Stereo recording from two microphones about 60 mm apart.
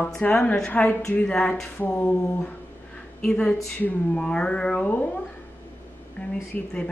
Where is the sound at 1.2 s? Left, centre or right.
Centre.